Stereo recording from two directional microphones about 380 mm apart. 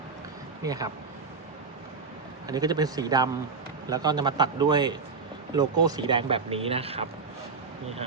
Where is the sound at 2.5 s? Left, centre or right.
Centre.